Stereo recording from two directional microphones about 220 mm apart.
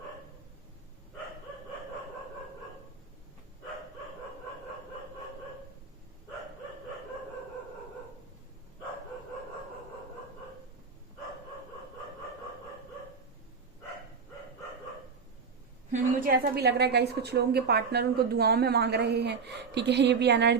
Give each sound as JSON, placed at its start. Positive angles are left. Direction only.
{"t": 15.9, "sound": "a woman's voice", "side_deg": -40}